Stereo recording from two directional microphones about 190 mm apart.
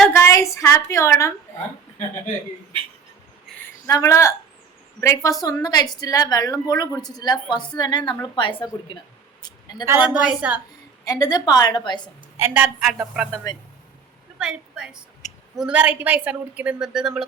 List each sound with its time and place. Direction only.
0.1 s a woman's voice: 15° left (ahead or behind)
3.6 s a woman's voice: 15° left (ahead or behind)
9.4 s a sound: 20° left (ahead or behind)
9.8 s a woman's voice: 10° right (ahead or behind)
11.0 s a woman's voice: 20° left (ahead or behind)
12.4 s a woman's voice: 10° right (ahead or behind)
13.5 s a woman's voice: 20° left (ahead or behind)
14.3 s a woman's voice: 5° right (ahead or behind)